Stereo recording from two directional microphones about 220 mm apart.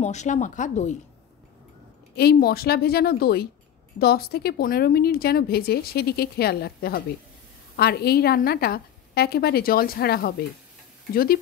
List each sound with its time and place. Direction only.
0.0 s speech: 30° left (ahead or behind)
2.1 s a woman's voice: 45° left (ahead or behind)